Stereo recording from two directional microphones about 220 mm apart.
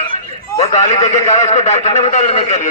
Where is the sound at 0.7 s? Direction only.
20° left (ahead or behind).